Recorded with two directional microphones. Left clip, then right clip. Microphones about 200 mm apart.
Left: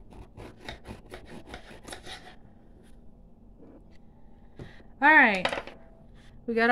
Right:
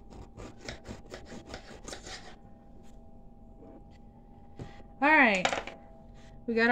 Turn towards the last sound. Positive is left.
turn(degrees=20)  # may be behind; listen again after turning